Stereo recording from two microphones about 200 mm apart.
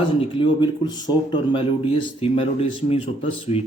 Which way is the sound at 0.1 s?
25° left (ahead or behind).